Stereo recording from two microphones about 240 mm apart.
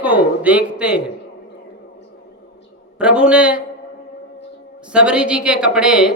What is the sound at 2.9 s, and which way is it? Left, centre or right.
Speech, centre.